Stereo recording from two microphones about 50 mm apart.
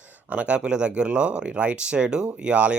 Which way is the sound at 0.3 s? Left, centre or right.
Right.